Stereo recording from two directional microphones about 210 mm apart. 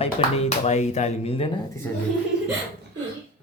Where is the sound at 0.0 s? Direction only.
30° left (ahead or behind).